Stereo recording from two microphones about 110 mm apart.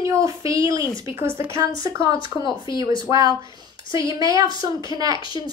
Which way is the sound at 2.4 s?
45° left (ahead or behind).